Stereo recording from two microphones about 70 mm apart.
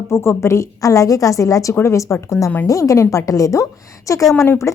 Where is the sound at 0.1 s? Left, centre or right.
Left.